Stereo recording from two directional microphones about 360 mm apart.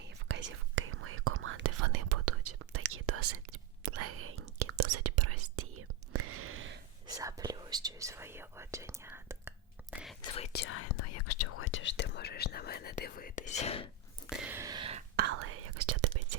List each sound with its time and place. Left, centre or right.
0.3 s whispering: right
7.1 s speech: centre
10.2 s speech: centre
10.5 s speech: left
14.3 s a sound: centre
15.1 s whispering: right